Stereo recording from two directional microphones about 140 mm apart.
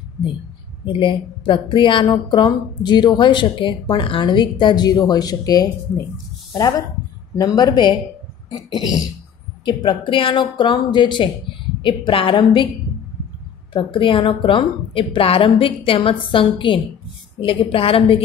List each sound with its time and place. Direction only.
0.8 s a woman's voice: 35° left (ahead or behind)
7.3 s a woman's voice: 30° left (ahead or behind)
8.5 s a sound: 30° left (ahead or behind)
9.7 s a woman's voice: 35° left (ahead or behind)
13.7 s a woman's voice: 35° left (ahead or behind)